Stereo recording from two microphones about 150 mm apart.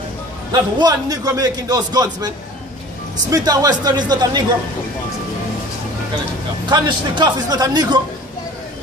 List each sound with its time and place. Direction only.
0.5 s a man's voice: 25° right (ahead or behind)
6.7 s a man's voice: 25° right (ahead or behind)